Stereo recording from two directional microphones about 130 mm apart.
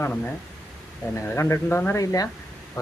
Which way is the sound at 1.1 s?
20° left (ahead or behind).